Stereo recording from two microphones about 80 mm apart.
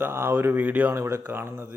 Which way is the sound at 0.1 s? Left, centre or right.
Right.